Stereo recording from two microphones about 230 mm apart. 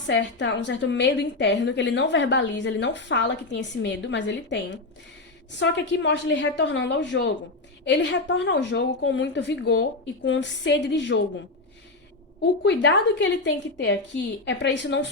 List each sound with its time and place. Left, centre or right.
0.1 s a woman's voice: left
12.4 s a woman's voice: left